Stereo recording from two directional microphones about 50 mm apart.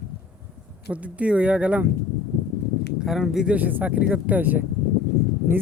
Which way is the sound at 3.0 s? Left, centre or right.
Centre.